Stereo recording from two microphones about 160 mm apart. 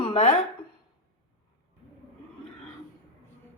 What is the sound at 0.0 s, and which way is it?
Speech, 40° left (ahead or behind).